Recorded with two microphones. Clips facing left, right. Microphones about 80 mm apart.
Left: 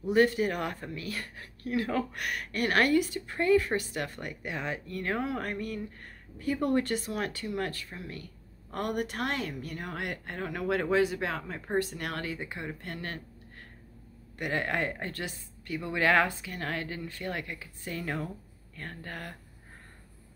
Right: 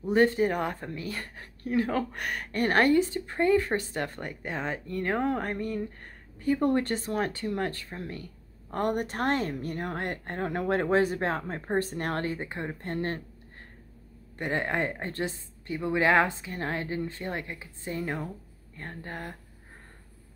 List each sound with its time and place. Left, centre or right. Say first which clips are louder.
0.0 s speech: right 2 dB; right
14.4 s a woman's voice: right 2 dB; right